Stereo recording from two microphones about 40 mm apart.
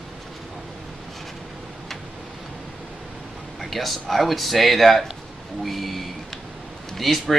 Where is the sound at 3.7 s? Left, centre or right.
Centre.